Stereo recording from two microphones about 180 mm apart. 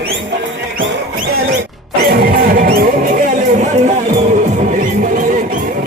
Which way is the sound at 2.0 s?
60° right (ahead or behind).